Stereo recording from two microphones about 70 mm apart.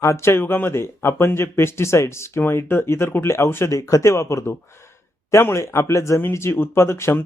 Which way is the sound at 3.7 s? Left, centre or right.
Left.